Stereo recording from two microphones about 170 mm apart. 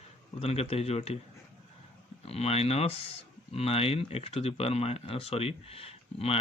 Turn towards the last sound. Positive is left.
turn(degrees=35)  # may be behind; listen again after turning